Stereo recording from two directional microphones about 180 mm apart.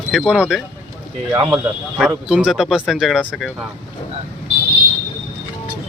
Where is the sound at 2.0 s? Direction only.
5° right (ahead or behind).